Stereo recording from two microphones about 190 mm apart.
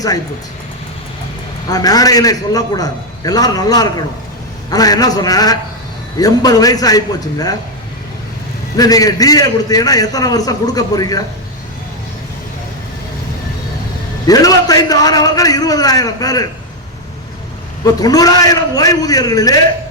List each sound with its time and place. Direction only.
1.6 s a man's voice: 20° left (ahead or behind)
8.7 s a man's voice: 20° left (ahead or behind)
14.3 s a man's voice: 20° left (ahead or behind)
18.0 s a man's voice: 20° left (ahead or behind)